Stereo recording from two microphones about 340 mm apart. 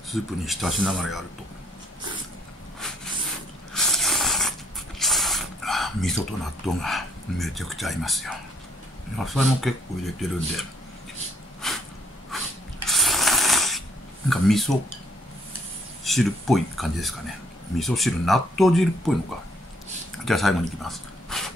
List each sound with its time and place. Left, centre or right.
0.1 s speech: centre
3.7 s mechanisms: centre
9.6 s speech: centre
11.6 s a sound: centre
12.8 s ratchet: centre
14.3 s speech: centre
16.0 s speech: centre
20.2 s speech: centre